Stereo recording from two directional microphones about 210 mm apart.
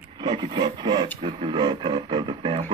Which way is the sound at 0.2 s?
20° right (ahead or behind).